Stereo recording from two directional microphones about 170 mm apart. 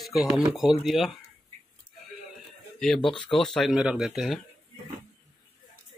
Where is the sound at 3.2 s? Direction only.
5° left (ahead or behind).